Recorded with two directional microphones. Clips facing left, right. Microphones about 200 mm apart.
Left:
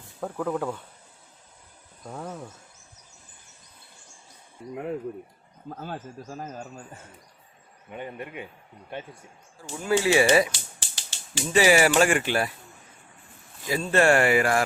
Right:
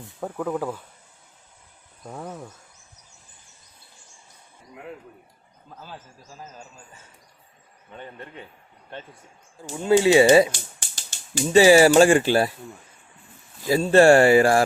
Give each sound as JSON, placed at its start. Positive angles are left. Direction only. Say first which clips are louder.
{"t": 0.2, "sound": "speech", "louder": "right 1 dB", "side_deg": -5}
{"t": 2.0, "sound": "speech", "louder": "right 1 dB", "side_deg": 0}
{"t": 5.6, "sound": "speech", "louder": "left 7 dB", "side_deg": 55}
{"t": 7.9, "sound": "a man's voice", "louder": "left 4 dB", "side_deg": 15}
{"t": 9.8, "sound": "speech", "louder": "right 6 dB", "side_deg": -25}
{"t": 10.5, "sound": "a sound", "louder": "right 4 dB", "side_deg": -50}
{"t": 11.5, "sound": "speech", "louder": "right 6 dB", "side_deg": -30}
{"t": 13.7, "sound": "speech", "louder": "right 7 dB", "side_deg": -30}